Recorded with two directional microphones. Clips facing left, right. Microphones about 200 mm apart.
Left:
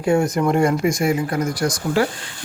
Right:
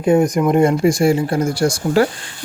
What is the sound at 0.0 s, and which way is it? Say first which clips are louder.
Speech: right 4 dB; 20° right (ahead or behind).